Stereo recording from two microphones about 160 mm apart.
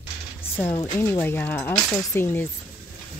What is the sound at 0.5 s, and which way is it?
Speech, 15° left (ahead or behind).